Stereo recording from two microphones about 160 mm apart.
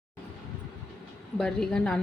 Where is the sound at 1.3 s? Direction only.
5° left (ahead or behind).